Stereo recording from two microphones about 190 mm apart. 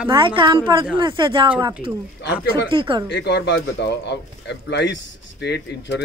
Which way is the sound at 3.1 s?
65° left (ahead or behind).